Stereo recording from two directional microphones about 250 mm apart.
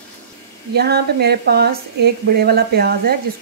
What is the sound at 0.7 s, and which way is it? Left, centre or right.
Speech, right.